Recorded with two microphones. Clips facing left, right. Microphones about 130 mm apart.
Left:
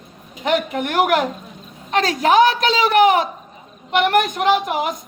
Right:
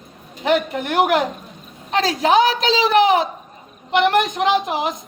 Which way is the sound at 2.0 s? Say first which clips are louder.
Left 1 dB; 30° right (ahead or behind).